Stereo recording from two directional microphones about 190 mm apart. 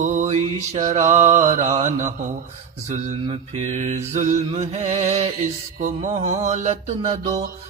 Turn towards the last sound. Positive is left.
turn(degrees=-35)  # may be behind; listen again after turning